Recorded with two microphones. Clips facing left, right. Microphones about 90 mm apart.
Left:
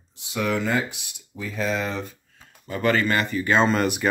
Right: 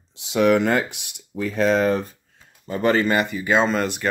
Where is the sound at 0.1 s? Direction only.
90° right; by 2.1 s 45° right (ahead or behind).